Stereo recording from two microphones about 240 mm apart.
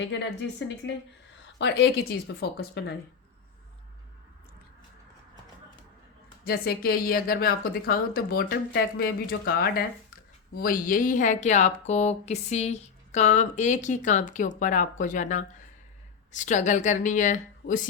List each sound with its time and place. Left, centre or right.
0.0 s speech: left
1.5 s speech: left
6.4 s speech: left